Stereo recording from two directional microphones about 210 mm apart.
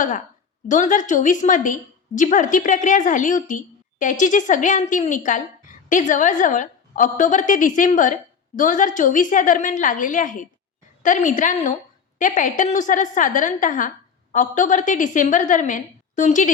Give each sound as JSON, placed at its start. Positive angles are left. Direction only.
{"t": 0.7, "sound": "a woman's voice", "side_deg": 35}